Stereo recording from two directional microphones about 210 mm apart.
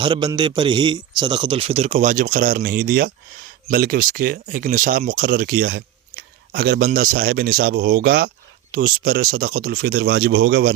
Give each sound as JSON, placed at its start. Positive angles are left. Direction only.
{"t": 0.0, "sound": "a man's voice", "side_deg": -20}